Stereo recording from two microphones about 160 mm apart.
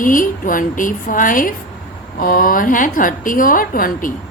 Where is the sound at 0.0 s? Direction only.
55° left (ahead or behind).